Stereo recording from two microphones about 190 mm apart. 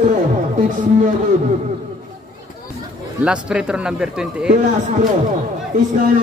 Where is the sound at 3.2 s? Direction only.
5° right (ahead or behind).